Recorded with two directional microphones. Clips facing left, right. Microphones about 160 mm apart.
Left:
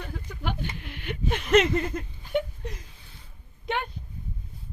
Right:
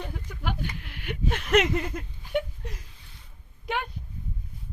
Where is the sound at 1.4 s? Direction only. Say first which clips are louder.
Left 2 dB; 10° right (ahead or behind).